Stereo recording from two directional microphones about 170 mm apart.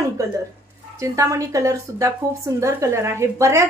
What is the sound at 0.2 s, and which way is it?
A woman's voice, 20° right (ahead or behind).